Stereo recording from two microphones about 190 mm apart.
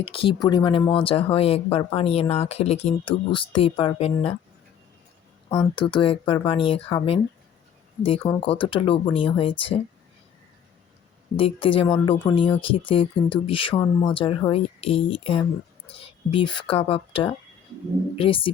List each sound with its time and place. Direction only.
0.0 s speech: 30° left (ahead or behind)
5.7 s speech: 25° left (ahead or behind)
11.3 s speech: 30° left (ahead or behind)